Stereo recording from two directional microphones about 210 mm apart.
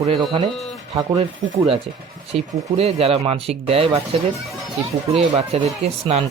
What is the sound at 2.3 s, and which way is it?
Speech, 30° right (ahead or behind).